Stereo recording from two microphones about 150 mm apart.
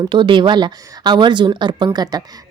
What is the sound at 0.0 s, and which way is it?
Speech, 30° right (ahead or behind).